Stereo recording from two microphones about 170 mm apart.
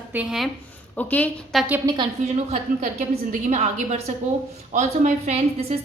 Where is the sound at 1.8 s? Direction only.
25° right (ahead or behind).